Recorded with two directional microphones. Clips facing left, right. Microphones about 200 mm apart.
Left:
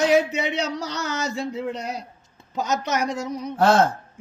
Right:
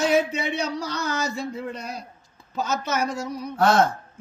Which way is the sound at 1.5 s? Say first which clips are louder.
Left 4 dB; 90° left.